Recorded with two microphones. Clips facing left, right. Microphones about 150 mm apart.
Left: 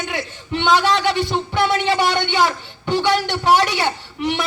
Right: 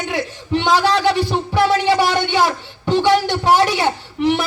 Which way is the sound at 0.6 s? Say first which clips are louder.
Even; 35° right (ahead or behind).